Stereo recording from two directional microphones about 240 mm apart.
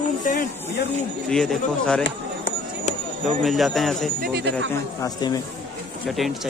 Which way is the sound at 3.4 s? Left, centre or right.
Centre.